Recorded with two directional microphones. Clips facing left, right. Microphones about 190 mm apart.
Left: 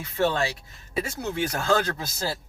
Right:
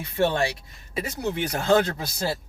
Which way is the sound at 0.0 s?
20° right (ahead or behind).